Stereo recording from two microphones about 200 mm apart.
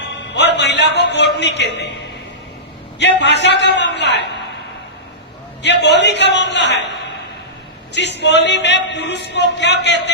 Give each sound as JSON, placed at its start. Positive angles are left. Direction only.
{"t": 0.0, "sound": "music", "side_deg": 60}
{"t": 0.9, "sound": "speech", "side_deg": 60}
{"t": 3.0, "sound": "speech", "side_deg": 60}
{"t": 5.8, "sound": "speech", "side_deg": 60}